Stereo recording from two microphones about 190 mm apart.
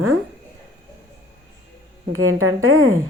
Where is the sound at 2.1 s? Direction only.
90° right.